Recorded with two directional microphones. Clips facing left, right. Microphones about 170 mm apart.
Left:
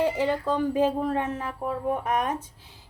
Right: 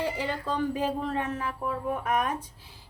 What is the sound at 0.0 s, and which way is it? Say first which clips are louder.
A woman's voice: left 6 dB; 20° left (ahead or behind).